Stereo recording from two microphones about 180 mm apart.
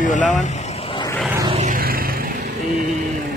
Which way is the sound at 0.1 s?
45° left (ahead or behind).